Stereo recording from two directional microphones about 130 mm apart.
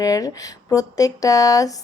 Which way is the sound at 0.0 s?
25° left (ahead or behind).